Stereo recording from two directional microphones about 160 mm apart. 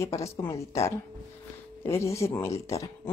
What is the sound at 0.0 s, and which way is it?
A woman's voice, 20° left (ahead or behind).